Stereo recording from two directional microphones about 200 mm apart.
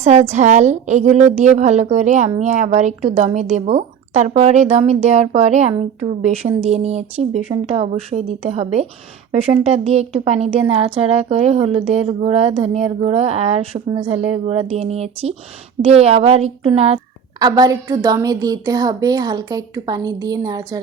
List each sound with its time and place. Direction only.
0.0 s a woman's voice: 35° right (ahead or behind)
17.4 s a woman's voice: 20° right (ahead or behind)